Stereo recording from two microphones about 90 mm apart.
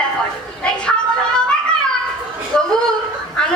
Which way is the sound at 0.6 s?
10° left (ahead or behind).